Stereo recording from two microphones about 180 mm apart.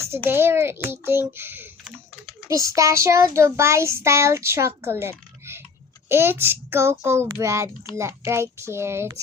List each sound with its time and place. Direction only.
0.3 s a child's voice: 10° right (ahead or behind)
2.5 s child singing: 15° right (ahead or behind)